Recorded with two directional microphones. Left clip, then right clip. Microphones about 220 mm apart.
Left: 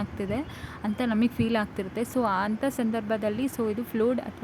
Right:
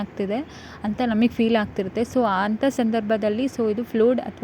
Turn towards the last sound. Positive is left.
turn(degrees=-15)  # may be behind; listen again after turning